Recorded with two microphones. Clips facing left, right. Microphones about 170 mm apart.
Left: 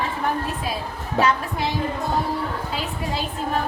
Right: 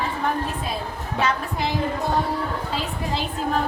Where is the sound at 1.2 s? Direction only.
40° left (ahead or behind).